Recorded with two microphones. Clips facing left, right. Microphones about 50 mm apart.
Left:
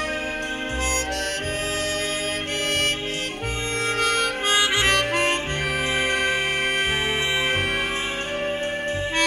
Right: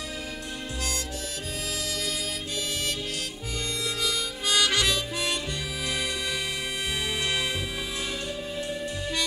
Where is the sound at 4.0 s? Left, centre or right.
Left.